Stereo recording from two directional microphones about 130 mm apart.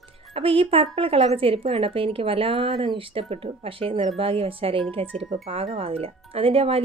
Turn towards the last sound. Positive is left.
turn(degrees=-45)  # may be behind; listen again after turning